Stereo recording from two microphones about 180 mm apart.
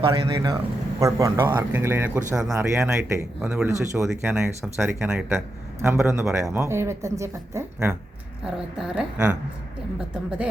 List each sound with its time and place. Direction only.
0.0 s speech: 20° right (ahead or behind)